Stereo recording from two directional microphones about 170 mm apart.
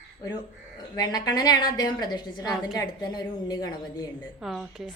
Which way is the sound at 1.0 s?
20° left (ahead or behind).